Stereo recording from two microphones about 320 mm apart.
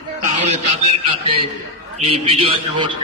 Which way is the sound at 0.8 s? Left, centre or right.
Centre.